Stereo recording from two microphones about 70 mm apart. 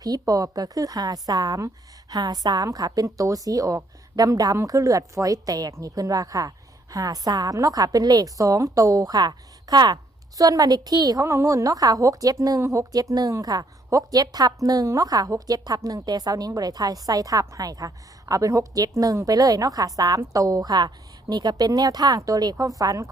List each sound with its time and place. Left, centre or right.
0.0 s a woman's voice: right
11.3 s a woman's voice: right